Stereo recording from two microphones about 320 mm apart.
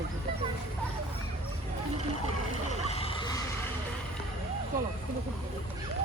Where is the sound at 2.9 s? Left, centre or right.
Centre.